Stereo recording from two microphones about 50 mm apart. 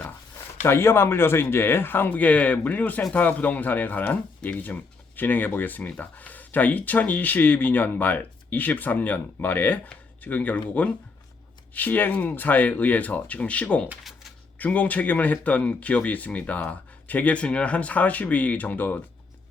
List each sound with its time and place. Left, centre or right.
0.6 s speech: left
14.0 s a sound: centre
14.6 s speech: left